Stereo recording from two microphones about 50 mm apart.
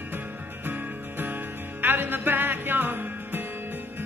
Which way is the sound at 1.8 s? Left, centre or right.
Right.